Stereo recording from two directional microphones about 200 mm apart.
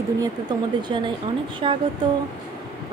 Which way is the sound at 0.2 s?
20° right (ahead or behind).